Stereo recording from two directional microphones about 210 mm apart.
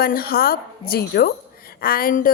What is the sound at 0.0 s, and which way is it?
A woman's voice, 45° left (ahead or behind).